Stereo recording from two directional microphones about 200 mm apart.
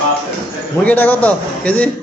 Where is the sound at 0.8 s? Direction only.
10° left (ahead or behind).